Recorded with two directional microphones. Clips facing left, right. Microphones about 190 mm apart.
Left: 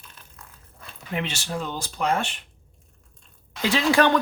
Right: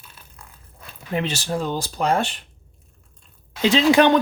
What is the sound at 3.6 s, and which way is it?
Speech, 20° right (ahead or behind).